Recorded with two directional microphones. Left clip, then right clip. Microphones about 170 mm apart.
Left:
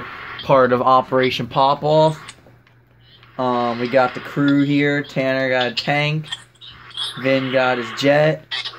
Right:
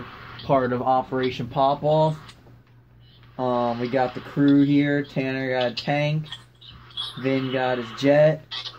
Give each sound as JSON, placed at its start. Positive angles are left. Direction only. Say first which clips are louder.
{"t": 0.0, "sound": "a sound", "louder": "left 9 dB", "side_deg": 40}
{"t": 0.5, "sound": "speech", "louder": "left 7 dB", "side_deg": 75}
{"t": 1.9, "sound": "speech", "louder": "left 5 dB", "side_deg": 40}
{"t": 3.3, "sound": "speech", "louder": "left 4 dB", "side_deg": 35}